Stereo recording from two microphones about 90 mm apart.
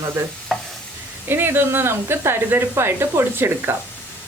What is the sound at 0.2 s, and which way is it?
Speech, 25° right (ahead or behind).